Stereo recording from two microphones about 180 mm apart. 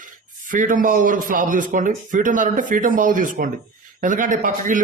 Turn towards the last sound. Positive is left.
turn(degrees=-50)  # may be behind; listen again after turning